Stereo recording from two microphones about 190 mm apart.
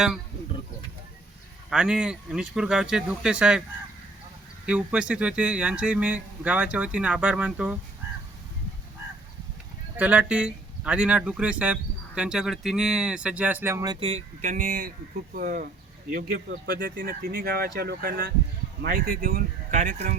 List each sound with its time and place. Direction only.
1.7 s speech: 5° right (ahead or behind)
4.6 s a man's voice: 5° right (ahead or behind)
10.0 s a man's voice: 5° right (ahead or behind); by 20.1 s 40° right (ahead or behind)